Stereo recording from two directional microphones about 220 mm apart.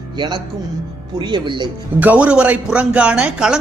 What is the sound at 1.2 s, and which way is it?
Speech, 20° right (ahead or behind).